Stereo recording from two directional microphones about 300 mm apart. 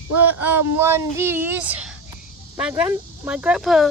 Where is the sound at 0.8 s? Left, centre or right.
Centre.